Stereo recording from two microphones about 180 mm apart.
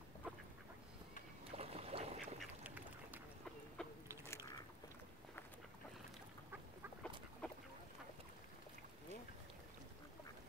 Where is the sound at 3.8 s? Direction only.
5° left (ahead or behind).